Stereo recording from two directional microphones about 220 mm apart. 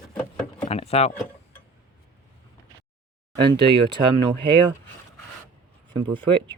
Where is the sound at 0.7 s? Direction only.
25° left (ahead or behind).